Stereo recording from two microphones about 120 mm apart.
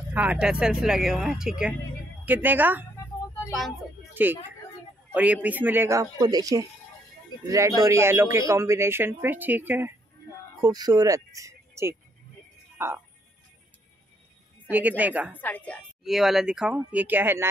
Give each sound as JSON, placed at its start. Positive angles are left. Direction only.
{"t": 0.1, "sound": "speech", "side_deg": -10}
{"t": 4.1, "sound": "a woman's voice", "side_deg": -15}
{"t": 10.6, "sound": "speech", "side_deg": -35}
{"t": 14.7, "sound": "speech", "side_deg": -15}
{"t": 15.3, "sound": "a woman's voice", "side_deg": 15}
{"t": 16.0, "sound": "speech", "side_deg": -5}